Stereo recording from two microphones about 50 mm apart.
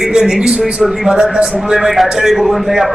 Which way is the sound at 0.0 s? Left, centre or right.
Centre.